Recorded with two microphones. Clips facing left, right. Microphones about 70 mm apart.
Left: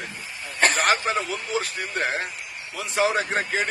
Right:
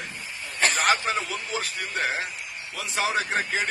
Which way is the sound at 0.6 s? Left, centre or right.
Left.